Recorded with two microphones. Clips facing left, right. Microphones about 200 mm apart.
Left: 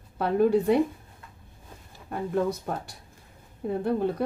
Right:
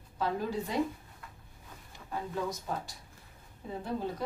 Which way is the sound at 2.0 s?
60° left (ahead or behind).